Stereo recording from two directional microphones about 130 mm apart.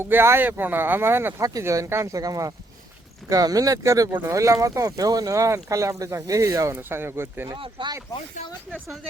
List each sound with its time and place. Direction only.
0.0 s speech: 20° right (ahead or behind)
7.5 s speech: 40° right (ahead or behind)